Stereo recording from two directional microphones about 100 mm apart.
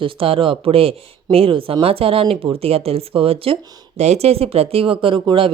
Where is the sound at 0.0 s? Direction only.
65° right (ahead or behind).